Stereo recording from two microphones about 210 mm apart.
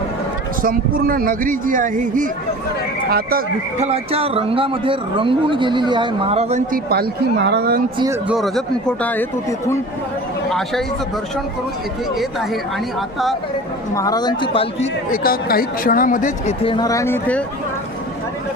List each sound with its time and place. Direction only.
0.6 s speech: 45° right (ahead or behind)
3.8 s a man's voice: 30° right (ahead or behind)
6.9 s speech: 50° right (ahead or behind)
8.3 s speech: centre (ahead or behind)
13.9 s speech: 15° left (ahead or behind)
15.1 s speech: 45° left (ahead or behind)
16.6 s speech: 20° left (ahead or behind)